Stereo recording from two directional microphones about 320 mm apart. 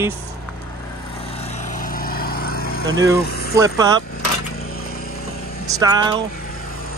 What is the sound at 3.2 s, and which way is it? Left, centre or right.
Speech, left.